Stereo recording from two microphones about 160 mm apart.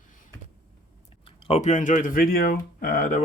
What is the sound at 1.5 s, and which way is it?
Speech, 45° left (ahead or behind).